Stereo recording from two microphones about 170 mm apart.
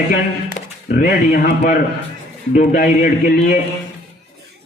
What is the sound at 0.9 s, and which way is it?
Speech, 55° left (ahead or behind).